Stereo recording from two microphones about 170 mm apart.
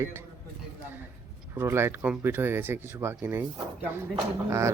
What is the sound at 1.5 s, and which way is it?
Speech, 15° right (ahead or behind).